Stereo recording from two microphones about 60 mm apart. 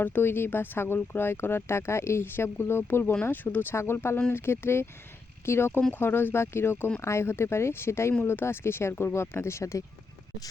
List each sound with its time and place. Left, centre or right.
0.0 s speech: left
3.8 s speech: left